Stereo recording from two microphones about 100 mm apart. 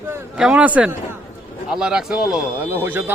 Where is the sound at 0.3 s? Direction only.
10° right (ahead or behind).